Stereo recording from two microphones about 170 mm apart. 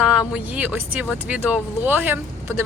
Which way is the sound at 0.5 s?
10° right (ahead or behind).